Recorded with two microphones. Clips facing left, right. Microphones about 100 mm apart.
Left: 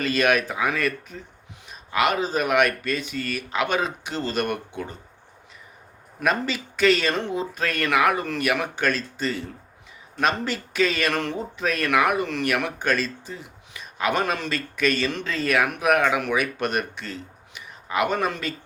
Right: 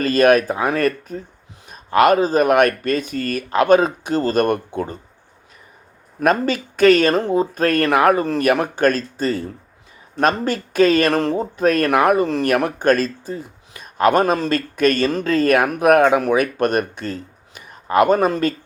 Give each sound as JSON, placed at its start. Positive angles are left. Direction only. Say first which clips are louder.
{"t": 0.0, "sound": "speech", "louder": "right 8 dB", "side_deg": -40}
{"t": 6.1, "sound": "speech", "louder": "right 7 dB", "side_deg": -45}